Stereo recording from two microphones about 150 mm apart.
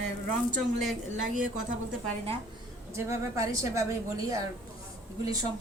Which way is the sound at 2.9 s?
20° right (ahead or behind).